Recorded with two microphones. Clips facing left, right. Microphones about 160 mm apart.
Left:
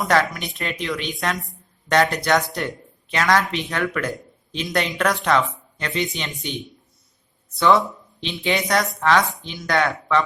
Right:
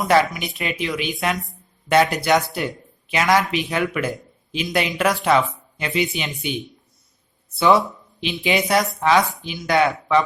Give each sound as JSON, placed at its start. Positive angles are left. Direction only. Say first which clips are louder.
{"t": 0.0, "sound": "a woman's voice", "louder": "right 2 dB", "side_deg": -5}